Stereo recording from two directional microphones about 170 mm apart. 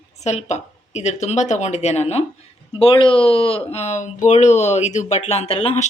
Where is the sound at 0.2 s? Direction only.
40° left (ahead or behind).